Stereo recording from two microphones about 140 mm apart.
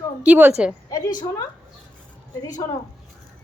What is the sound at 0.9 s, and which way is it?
Speech, 30° left (ahead or behind).